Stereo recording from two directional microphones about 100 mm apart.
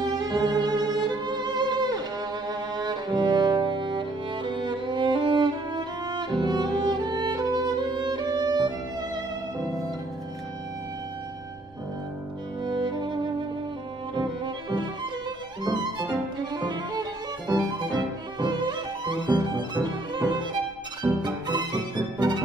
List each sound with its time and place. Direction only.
0.0 s music: 40° right (ahead or behind)
12.6 s music: 50° right (ahead or behind)
14.1 s music: 45° right (ahead or behind)
15.6 s violin: 45° right (ahead or behind)
21.2 s music: 45° right (ahead or behind)